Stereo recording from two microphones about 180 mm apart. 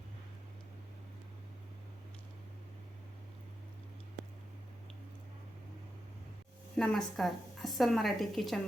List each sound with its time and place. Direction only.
6.7 s a woman's voice: 5° left (ahead or behind)